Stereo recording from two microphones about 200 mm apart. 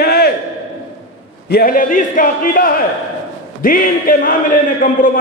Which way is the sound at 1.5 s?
45° left (ahead or behind).